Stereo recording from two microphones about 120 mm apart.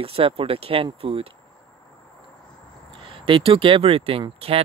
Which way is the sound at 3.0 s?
45° right (ahead or behind).